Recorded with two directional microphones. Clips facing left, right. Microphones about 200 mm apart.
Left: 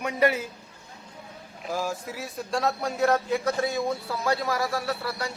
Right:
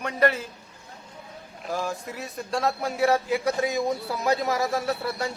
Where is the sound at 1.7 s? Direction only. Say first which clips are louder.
Even; 5° left (ahead or behind).